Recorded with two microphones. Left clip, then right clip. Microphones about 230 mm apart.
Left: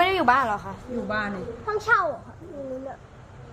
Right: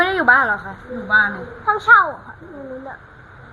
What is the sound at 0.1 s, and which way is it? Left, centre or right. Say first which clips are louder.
Speech: right 6 dB; centre.